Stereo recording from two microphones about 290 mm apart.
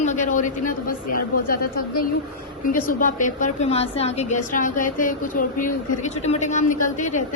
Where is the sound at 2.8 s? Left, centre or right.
Left.